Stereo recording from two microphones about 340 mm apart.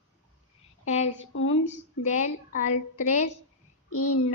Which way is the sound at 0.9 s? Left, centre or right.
Centre.